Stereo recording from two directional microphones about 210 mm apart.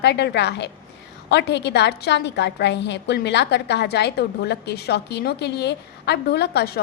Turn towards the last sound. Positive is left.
turn(degrees=50)  # may be behind; listen again after turning